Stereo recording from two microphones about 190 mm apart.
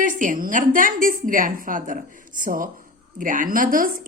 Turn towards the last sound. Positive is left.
turn(degrees=-45)  # may be behind; listen again after turning